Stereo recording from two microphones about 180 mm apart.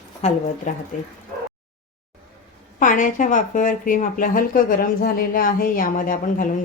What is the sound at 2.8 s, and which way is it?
Speech, 45° left (ahead or behind).